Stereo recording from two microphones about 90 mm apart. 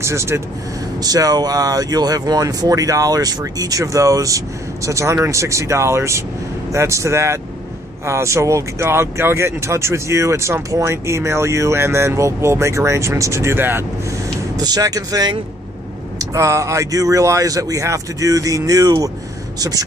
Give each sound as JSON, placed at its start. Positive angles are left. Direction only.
{"t": 0.0, "sound": "speech", "side_deg": -30}
{"t": 1.0, "sound": "speech", "side_deg": -45}
{"t": 14.6, "sound": "speech", "side_deg": -45}
{"t": 16.3, "sound": "speech", "side_deg": -35}